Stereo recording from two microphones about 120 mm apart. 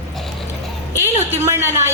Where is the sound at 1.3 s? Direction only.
20° right (ahead or behind).